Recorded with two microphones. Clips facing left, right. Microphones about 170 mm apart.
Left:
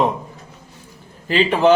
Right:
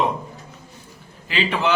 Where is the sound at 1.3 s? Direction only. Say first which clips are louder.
Left 7 dB; 45° left (ahead or behind).